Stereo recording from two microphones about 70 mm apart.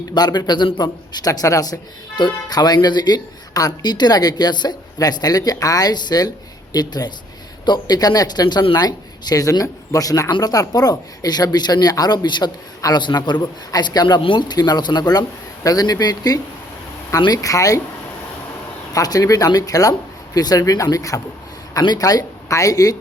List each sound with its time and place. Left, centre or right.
0.1 s a man's voice: left
13.4 s a man's voice: left
17.2 s speech: left
18.9 s speech: left